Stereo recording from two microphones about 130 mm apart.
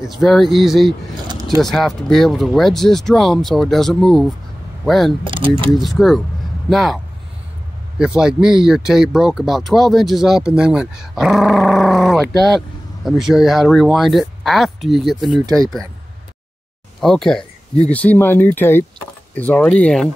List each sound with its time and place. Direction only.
0.2 s speech: centre (ahead or behind)
5.2 s speech: 40° right (ahead or behind)
5.8 s speech: centre (ahead or behind)
8.0 s speech: 5° right (ahead or behind)
15.4 s speech: 30° right (ahead or behind)
17.0 s speech: 5° left (ahead or behind)